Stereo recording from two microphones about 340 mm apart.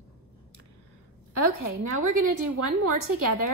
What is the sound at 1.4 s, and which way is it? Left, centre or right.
A woman's voice, right.